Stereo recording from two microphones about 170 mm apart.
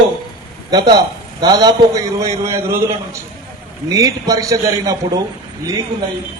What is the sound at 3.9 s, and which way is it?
A man's voice, 20° right (ahead or behind).